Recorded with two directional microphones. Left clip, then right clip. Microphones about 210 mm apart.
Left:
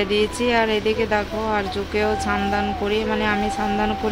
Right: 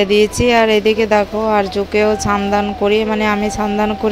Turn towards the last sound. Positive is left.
turn(degrees=-30)  # may be behind; listen again after turning